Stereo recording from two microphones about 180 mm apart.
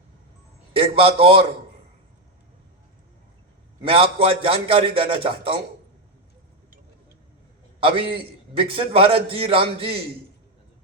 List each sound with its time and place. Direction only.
0.7 s a man's voice: 30° right (ahead or behind)
3.8 s a man's voice: 30° right (ahead or behind)
7.8 s a man's voice: 30° right (ahead or behind)